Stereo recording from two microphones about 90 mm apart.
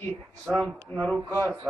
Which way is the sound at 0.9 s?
25° left (ahead or behind).